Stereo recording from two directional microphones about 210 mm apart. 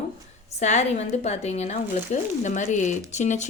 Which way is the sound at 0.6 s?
35° left (ahead or behind).